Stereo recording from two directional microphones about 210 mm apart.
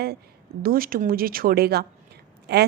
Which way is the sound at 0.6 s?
45° right (ahead or behind).